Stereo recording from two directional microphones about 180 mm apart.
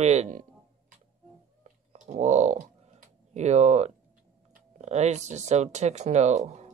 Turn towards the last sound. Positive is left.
turn(degrees=-40)  # may be behind; listen again after turning